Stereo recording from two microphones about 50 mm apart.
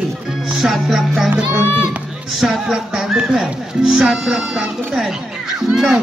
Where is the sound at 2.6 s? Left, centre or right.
Centre.